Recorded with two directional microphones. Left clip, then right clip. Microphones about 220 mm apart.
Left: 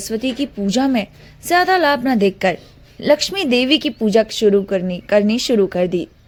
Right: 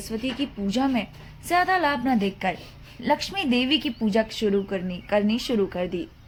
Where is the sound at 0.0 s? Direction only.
45° left (ahead or behind).